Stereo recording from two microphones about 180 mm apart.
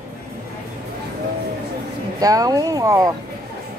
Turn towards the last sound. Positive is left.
turn(degrees=-20)  # may be behind; listen again after turning